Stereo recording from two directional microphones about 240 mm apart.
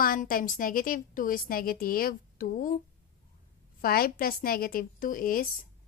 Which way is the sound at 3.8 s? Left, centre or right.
Left.